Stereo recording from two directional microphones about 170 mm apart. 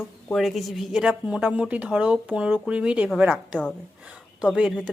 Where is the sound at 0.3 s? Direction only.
Centre (ahead or behind).